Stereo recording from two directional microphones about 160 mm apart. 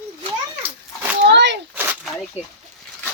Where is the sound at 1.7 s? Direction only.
10° right (ahead or behind).